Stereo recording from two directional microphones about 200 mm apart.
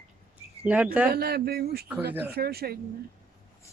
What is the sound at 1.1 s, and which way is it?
Speech, 50° right (ahead or behind).